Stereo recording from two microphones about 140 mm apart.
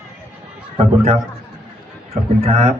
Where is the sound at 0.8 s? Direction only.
45° right (ahead or behind).